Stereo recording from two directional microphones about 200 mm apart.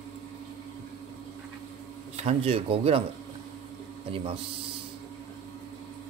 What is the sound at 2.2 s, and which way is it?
Speech, 30° right (ahead or behind).